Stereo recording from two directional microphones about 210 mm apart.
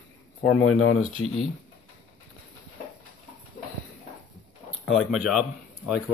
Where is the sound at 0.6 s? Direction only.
80° left.